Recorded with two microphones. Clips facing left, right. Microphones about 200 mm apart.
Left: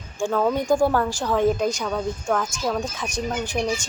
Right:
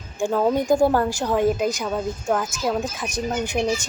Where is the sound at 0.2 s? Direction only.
20° right (ahead or behind).